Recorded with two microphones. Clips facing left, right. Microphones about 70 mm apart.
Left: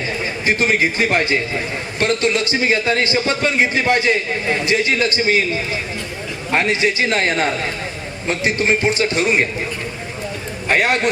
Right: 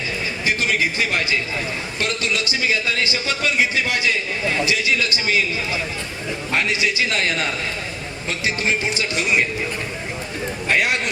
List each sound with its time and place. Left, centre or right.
0.4 s a man's voice: left
6.5 s a man's voice: left
10.7 s a man's voice: left